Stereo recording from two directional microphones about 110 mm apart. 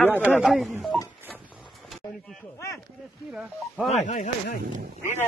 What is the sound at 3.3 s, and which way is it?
Speech, 5° right (ahead or behind).